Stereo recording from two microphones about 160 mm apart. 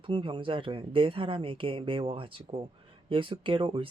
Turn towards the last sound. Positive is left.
turn(degrees=-35)  # may be behind; listen again after turning